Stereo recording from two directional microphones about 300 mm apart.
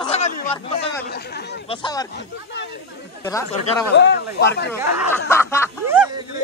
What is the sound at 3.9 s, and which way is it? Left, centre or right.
Speech, left.